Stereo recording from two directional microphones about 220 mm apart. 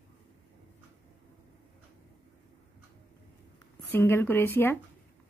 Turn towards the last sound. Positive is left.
turn(degrees=10)  # may be behind; listen again after turning